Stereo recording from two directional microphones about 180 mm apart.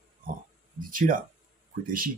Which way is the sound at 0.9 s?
50° right (ahead or behind).